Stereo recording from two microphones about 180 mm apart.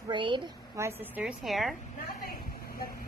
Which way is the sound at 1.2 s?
Centre (ahead or behind).